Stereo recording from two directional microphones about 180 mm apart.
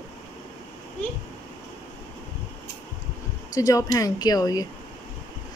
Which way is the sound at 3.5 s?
20° left (ahead or behind).